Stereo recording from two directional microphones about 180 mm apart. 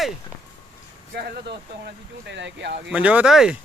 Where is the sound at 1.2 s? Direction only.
60° right (ahead or behind).